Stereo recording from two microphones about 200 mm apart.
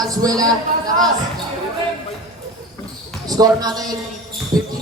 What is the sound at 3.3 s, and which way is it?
Speech, 20° right (ahead or behind).